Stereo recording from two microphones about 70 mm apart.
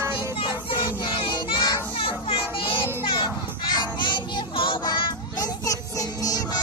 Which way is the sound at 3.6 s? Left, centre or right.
Left.